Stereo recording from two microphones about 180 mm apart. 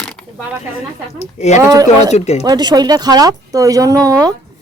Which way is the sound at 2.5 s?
20° right (ahead or behind).